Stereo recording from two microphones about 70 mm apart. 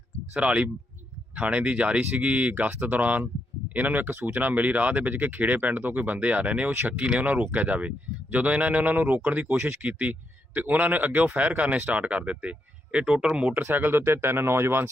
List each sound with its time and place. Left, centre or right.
0.3 s a man's voice: centre
13.5 s speech: right